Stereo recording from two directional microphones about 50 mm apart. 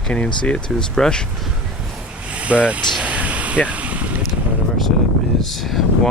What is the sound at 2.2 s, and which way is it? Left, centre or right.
Vehicle, right.